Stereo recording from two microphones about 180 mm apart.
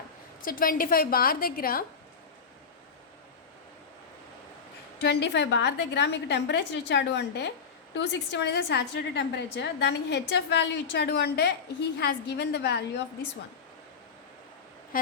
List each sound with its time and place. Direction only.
0.4 s a woman's voice: 50° left (ahead or behind)
4.9 s a woman's voice: 70° left (ahead or behind)